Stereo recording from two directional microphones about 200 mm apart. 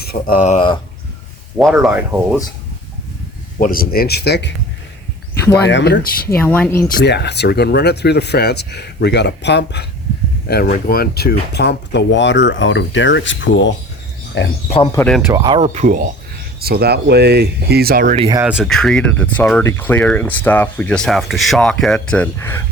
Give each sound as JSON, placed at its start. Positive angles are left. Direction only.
{"t": 0.1, "sound": "speech", "side_deg": 50}
{"t": 1.8, "sound": "speech", "side_deg": -5}
{"t": 3.6, "sound": "speech", "side_deg": 45}
{"t": 5.5, "sound": "speech", "side_deg": 55}
{"t": 6.2, "sound": "speech", "side_deg": 10}
{"t": 6.8, "sound": "speech", "side_deg": 50}
{"t": 14.9, "sound": "speech", "side_deg": 5}
{"t": 15.3, "sound": "speech", "side_deg": -20}
{"t": 16.6, "sound": "speech", "side_deg": -50}
{"t": 18.3, "sound": "speech", "side_deg": -5}